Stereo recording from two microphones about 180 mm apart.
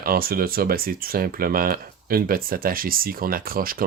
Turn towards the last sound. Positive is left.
turn(degrees=-55)  # may be behind; listen again after turning